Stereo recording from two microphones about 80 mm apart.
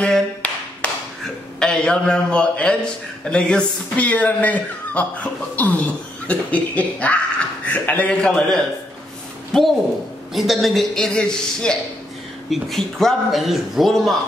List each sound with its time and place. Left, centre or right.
0.0 s tap: centre
1.2 s a man's voice: centre